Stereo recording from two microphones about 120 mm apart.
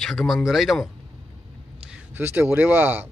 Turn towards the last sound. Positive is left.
turn(degrees=-15)  # may be behind; listen again after turning